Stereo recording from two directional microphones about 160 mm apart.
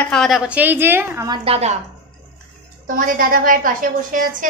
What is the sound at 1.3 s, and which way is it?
Speech, 35° right (ahead or behind).